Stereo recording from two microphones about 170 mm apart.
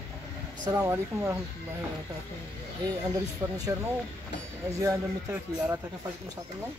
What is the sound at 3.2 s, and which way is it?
Speech, 20° right (ahead or behind).